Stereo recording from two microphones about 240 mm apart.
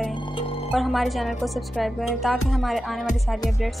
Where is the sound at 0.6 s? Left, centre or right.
Centre.